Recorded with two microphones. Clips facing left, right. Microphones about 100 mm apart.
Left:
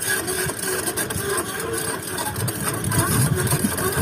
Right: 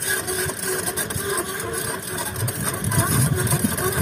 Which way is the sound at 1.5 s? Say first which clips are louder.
Left 1 dB; centre (ahead or behind).